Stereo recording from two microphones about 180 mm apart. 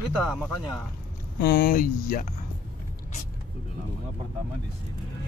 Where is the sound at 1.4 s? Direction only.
55° left (ahead or behind).